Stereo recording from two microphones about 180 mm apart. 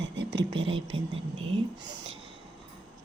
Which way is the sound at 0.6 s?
30° right (ahead or behind).